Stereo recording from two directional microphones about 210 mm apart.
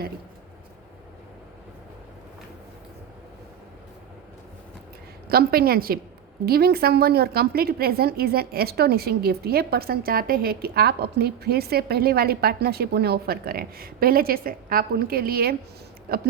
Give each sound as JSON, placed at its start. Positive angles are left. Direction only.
{"t": 5.3, "sound": "a woman's voice", "side_deg": -45}